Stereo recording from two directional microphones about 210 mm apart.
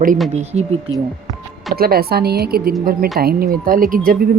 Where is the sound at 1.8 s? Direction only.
45° right (ahead or behind).